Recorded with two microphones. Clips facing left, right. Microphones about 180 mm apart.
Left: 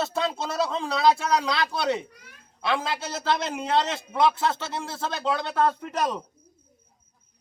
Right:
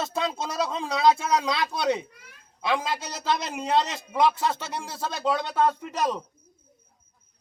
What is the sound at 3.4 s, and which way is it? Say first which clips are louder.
Speech: even; 10° right (ahead or behind).